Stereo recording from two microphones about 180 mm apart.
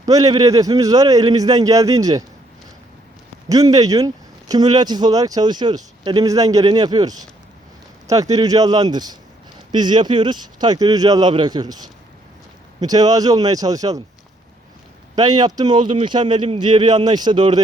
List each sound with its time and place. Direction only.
0.0 s speech: 20° right (ahead or behind)
3.5 s speech: 20° right (ahead or behind)
15.1 s speech: 20° right (ahead or behind)